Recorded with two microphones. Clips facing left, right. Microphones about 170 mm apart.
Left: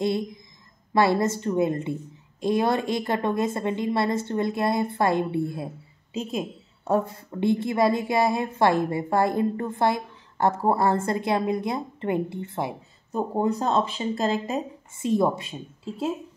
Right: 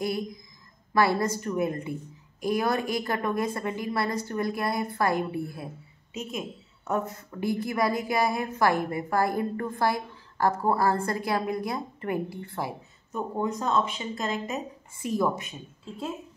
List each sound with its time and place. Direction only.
0.0 s a woman's voice: 25° left (ahead or behind)